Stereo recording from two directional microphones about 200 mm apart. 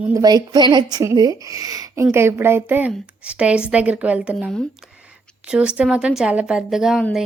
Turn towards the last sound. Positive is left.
turn(degrees=0)  # may be behind; listen again after turning